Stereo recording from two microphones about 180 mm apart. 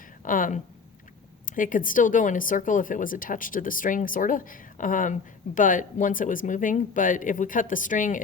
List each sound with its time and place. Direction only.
0.3 s speech: 45° left (ahead or behind)